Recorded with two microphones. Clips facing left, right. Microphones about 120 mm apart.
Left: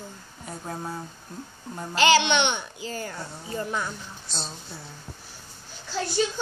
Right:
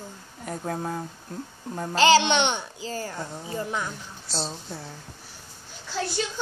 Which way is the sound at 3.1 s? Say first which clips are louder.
Right 2 dB; 15° right (ahead or behind).